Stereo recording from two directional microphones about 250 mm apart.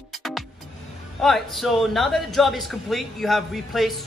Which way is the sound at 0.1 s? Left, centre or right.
Centre.